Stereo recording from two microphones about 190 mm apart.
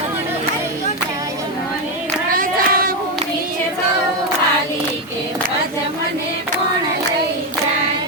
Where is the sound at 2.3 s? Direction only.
50° right (ahead or behind).